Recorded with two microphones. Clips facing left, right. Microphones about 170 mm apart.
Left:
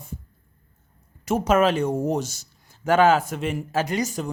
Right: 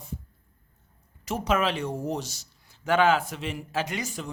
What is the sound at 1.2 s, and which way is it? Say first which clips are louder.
Speech: left 7 dB; 45° left (ahead or behind).